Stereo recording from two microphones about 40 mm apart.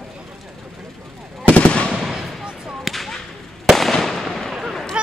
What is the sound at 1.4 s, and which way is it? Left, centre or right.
Fireworks, left.